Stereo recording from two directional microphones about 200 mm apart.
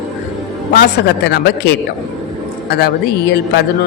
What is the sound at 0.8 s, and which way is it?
Speech, 50° left (ahead or behind).